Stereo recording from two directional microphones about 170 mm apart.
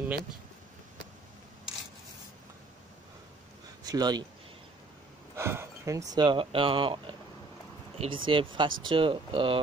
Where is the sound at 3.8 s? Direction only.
25° right (ahead or behind).